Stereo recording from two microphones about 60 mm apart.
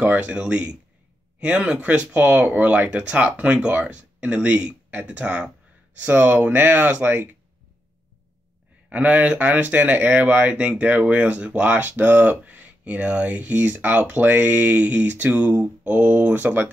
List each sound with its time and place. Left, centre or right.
0.0 s speech: right
8.9 s speech: right